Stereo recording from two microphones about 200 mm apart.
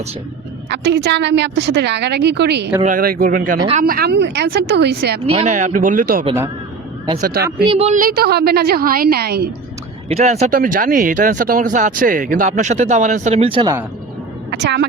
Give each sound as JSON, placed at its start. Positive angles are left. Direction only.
{"t": 0.7, "sound": "a woman's voice", "side_deg": -60}
{"t": 2.8, "sound": "a woman's voice", "side_deg": -45}
{"t": 5.2, "sound": "a woman's voice", "side_deg": -30}
{"t": 7.7, "sound": "speech", "side_deg": -30}
{"t": 8.0, "sound": "a woman's voice", "side_deg": -50}
{"t": 10.1, "sound": "speech", "side_deg": -35}
{"t": 14.5, "sound": "speech", "side_deg": -60}